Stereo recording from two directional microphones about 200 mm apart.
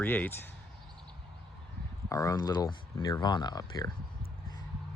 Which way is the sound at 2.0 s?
15° left (ahead or behind).